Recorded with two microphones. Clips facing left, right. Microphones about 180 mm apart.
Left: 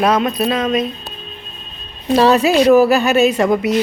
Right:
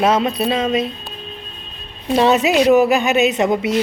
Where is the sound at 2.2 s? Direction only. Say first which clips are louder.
Left 2 dB; 20° right (ahead or behind).